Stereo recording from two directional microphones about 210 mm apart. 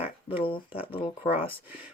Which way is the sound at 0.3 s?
25° left (ahead or behind).